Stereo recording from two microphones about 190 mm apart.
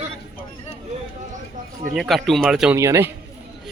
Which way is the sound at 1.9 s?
Centre (ahead or behind).